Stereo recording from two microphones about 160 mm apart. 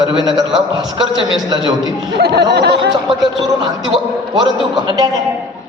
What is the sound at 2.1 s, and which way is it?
Speech, 90° right.